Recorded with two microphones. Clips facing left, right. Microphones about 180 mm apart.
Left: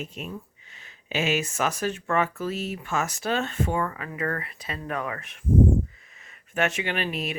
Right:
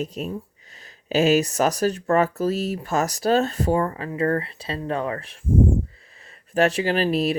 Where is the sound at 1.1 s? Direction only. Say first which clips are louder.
Right 8 dB; 40° right (ahead or behind).